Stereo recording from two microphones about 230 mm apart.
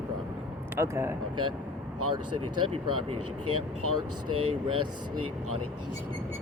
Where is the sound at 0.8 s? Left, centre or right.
Centre.